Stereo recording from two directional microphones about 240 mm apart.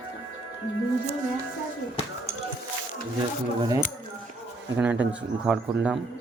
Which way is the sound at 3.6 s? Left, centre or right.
Centre.